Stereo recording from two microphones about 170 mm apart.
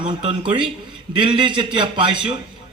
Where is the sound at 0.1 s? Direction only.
30° right (ahead or behind).